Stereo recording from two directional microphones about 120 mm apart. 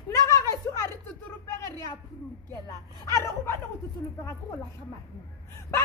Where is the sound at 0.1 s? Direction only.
25° left (ahead or behind).